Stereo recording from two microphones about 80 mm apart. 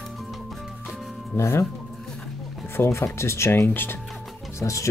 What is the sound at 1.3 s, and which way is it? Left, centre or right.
Speech, left.